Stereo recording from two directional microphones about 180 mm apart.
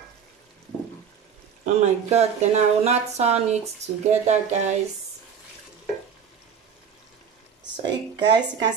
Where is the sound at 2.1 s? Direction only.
35° right (ahead or behind).